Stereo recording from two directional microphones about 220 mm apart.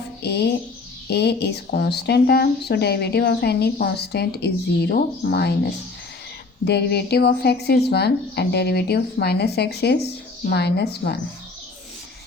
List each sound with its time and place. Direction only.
0.2 s speech: 50° left (ahead or behind)